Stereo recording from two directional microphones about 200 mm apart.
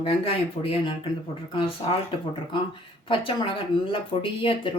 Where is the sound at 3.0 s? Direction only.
25° left (ahead or behind).